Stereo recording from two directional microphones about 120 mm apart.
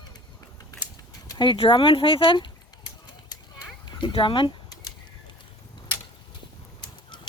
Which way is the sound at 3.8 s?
40° left (ahead or behind).